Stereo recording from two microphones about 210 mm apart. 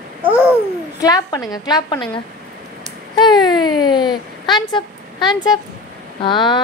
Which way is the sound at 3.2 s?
20° left (ahead or behind).